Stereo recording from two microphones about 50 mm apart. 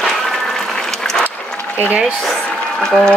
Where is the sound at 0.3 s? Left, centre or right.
Centre.